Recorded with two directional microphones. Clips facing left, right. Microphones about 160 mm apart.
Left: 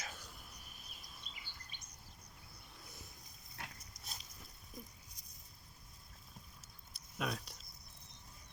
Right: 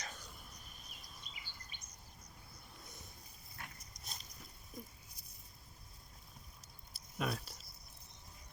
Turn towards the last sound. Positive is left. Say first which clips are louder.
# right 1 dB
turn(degrees=0)  # may be behind; listen again after turning